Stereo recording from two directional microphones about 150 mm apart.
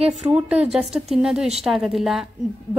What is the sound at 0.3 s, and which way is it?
A woman's voice, 10° right (ahead or behind).